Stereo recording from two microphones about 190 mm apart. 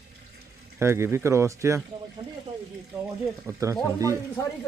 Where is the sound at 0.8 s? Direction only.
15° right (ahead or behind).